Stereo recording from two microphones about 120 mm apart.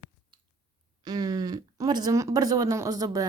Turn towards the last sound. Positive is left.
turn(degrees=-30)  # may be behind; listen again after turning